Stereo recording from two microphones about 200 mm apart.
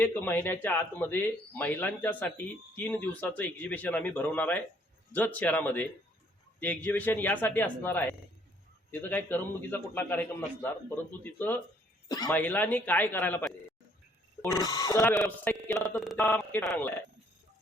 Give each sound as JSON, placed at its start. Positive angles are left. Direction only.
{"t": 0.0, "sound": "speech", "side_deg": 10}
{"t": 12.3, "sound": "speech", "side_deg": 10}
{"t": 14.5, "sound": "speech", "side_deg": 20}